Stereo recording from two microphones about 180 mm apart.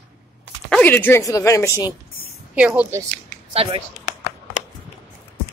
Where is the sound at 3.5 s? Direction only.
30° right (ahead or behind).